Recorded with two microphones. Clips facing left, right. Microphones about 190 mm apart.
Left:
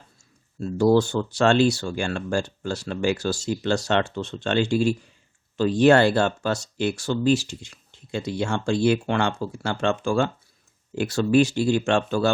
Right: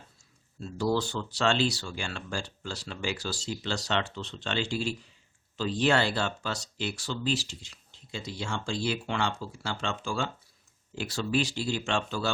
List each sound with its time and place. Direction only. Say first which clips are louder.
0.6 s speech: left 10 dB; 50° left (ahead or behind)